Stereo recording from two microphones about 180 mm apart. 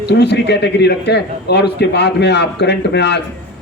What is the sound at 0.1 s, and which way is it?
A man's voice, 70° left (ahead or behind).